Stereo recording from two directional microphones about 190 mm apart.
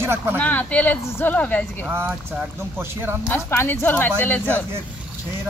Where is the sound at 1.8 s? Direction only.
10° right (ahead or behind).